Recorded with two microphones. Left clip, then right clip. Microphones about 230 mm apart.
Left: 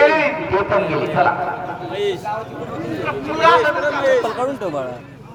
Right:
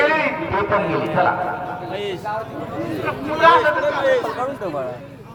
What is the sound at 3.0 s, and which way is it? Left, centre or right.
Speech, left.